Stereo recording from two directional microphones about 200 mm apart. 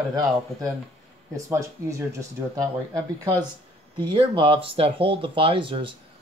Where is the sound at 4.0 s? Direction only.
25° right (ahead or behind).